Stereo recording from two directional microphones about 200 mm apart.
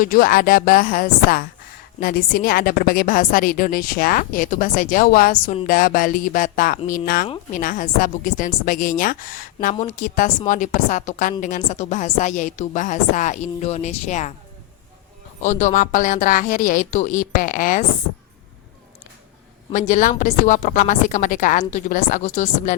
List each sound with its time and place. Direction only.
0.0 s a woman's voice: 45° left (ahead or behind)
15.4 s a woman's voice: 35° left (ahead or behind)
19.7 s a woman's voice: 40° left (ahead or behind)